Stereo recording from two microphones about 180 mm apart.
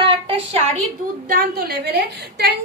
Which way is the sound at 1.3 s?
55° right (ahead or behind).